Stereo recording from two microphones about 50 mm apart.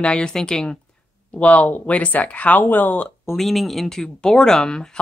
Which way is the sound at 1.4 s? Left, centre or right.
Left.